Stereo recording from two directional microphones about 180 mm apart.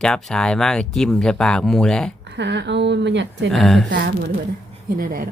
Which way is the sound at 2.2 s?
75° right (ahead or behind).